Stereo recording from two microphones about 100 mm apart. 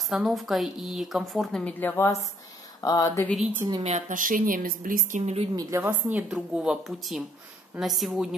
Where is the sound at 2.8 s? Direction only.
40° left (ahead or behind).